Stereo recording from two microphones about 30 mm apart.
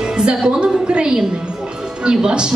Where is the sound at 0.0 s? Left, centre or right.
Right.